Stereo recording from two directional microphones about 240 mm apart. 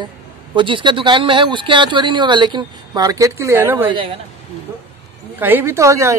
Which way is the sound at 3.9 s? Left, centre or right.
Right.